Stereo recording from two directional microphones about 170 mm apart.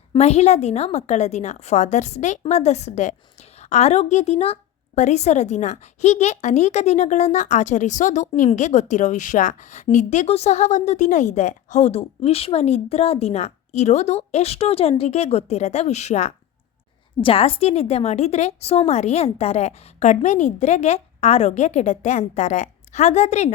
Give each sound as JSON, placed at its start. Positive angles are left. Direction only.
{"t": 0.1, "sound": "a woman's voice", "side_deg": 40}